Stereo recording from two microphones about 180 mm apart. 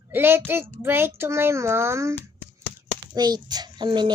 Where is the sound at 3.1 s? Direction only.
20° right (ahead or behind).